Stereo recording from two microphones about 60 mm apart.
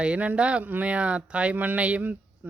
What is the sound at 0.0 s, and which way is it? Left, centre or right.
Speech, right.